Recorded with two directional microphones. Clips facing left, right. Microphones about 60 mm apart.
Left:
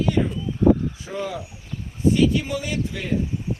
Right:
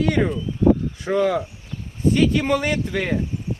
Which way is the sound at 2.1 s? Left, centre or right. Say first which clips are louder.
Right 4 dB; right.